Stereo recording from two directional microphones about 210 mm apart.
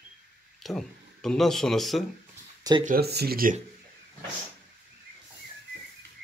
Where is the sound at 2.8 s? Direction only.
45° right (ahead or behind).